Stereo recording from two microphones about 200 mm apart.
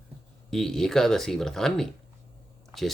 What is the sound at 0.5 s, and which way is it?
Speech, centre (ahead or behind).